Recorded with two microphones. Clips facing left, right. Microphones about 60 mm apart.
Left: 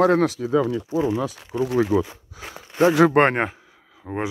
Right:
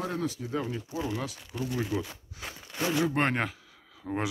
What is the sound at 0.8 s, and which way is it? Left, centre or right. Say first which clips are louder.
Speech: left 11 dB; left.